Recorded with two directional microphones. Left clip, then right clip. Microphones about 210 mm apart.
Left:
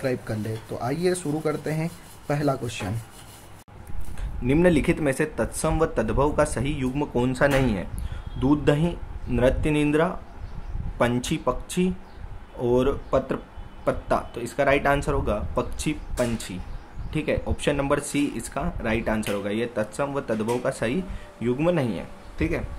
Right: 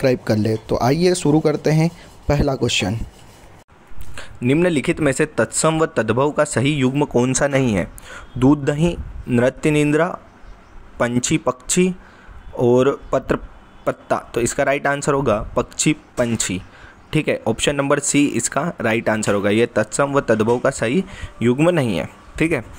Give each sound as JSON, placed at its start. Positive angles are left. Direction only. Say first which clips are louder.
{"t": 0.0, "sound": "speech", "louder": "right 10 dB", "side_deg": -35}
{"t": 4.1, "sound": "speech", "louder": "right 6 dB", "side_deg": -25}
{"t": 7.3, "sound": "speech", "louder": "right 4 dB", "side_deg": -35}